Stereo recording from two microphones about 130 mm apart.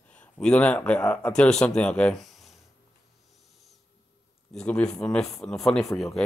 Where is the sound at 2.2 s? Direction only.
Centre (ahead or behind).